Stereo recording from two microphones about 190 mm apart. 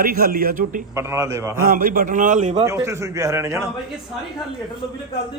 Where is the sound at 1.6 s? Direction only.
50° right (ahead or behind).